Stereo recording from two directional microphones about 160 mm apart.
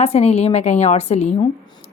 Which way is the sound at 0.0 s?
40° left (ahead or behind).